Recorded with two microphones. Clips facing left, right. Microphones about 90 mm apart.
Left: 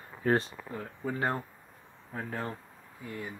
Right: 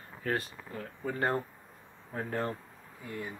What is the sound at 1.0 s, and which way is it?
Speech, 5° left (ahead or behind).